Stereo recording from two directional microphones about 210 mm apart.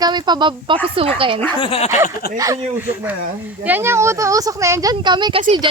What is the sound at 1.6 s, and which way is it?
Speech, 25° left (ahead or behind).